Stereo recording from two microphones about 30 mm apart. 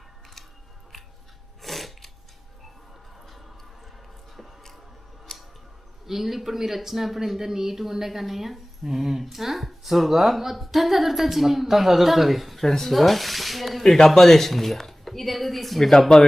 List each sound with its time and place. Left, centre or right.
0.9 s scissors: centre
1.6 s a sound: centre
6.1 s a man's voice: centre
16.1 s speech: left